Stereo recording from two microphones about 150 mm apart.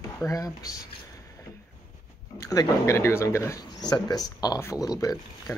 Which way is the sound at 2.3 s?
20° left (ahead or behind).